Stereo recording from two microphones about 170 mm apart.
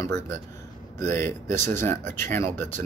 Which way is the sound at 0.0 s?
15° left (ahead or behind).